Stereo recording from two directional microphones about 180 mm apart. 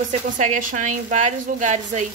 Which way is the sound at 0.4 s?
45° right (ahead or behind).